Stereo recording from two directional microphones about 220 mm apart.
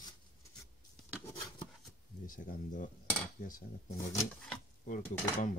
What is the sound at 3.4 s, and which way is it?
Speech, 40° left (ahead or behind).